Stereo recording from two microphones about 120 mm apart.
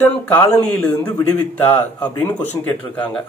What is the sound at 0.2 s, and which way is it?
A man's voice, 15° left (ahead or behind).